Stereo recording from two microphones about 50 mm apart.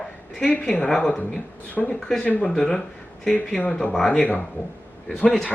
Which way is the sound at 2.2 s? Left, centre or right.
Left.